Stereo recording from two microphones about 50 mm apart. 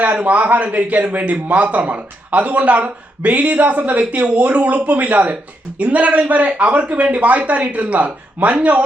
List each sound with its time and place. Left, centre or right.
0.0 s a man's voice: right